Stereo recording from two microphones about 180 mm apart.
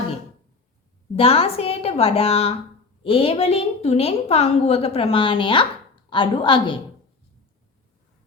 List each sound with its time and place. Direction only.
1.1 s a woman's voice: 30° left (ahead or behind)